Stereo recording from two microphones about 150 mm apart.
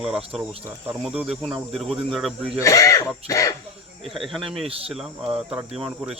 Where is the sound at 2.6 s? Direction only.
20° left (ahead or behind).